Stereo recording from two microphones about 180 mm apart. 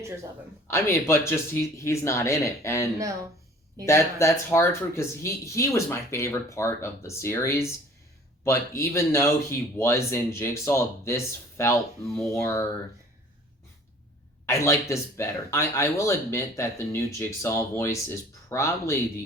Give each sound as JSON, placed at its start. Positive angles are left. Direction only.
{"t": 0.7, "sound": "speech", "side_deg": 15}
{"t": 14.4, "sound": "speech", "side_deg": 15}